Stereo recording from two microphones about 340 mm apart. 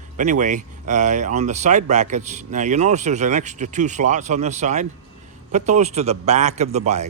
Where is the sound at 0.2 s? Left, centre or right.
Right.